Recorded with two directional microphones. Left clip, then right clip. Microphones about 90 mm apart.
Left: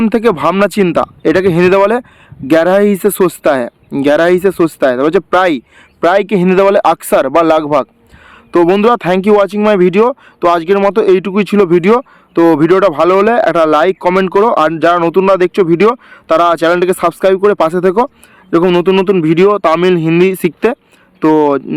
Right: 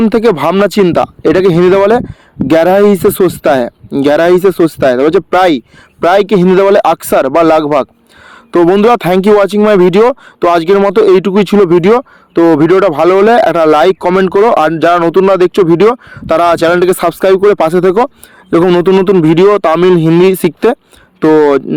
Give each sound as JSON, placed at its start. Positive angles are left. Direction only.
{"t": 0.1, "sound": "speech", "side_deg": -40}
{"t": 8.8, "sound": "speech", "side_deg": -50}
{"t": 10.8, "sound": "speech", "side_deg": -40}
{"t": 11.0, "sound": "speech", "side_deg": -55}
{"t": 14.0, "sound": "speech", "side_deg": -35}
{"t": 15.1, "sound": "speech", "side_deg": -30}
{"t": 19.2, "sound": "speech", "side_deg": -60}
{"t": 19.6, "sound": "speech", "side_deg": -45}